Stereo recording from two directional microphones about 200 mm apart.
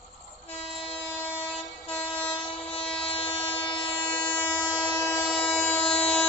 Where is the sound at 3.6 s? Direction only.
25° left (ahead or behind).